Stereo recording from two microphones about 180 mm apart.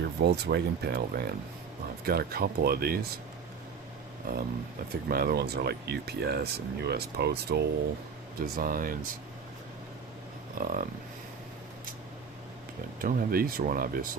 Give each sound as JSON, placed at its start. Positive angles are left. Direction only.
{"t": 0.0, "sound": "speech", "side_deg": -65}
{"t": 4.2, "sound": "speech", "side_deg": -55}
{"t": 8.4, "sound": "speech", "side_deg": -50}
{"t": 10.6, "sound": "speech", "side_deg": -50}
{"t": 13.0, "sound": "speech", "side_deg": -50}